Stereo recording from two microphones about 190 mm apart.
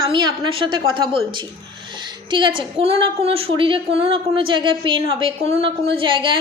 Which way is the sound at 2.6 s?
30° right (ahead or behind).